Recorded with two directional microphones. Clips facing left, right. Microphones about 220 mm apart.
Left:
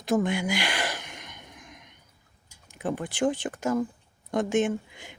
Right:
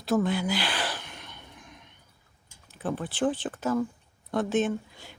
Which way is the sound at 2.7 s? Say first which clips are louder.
Left 1 dB; 15° left (ahead or behind).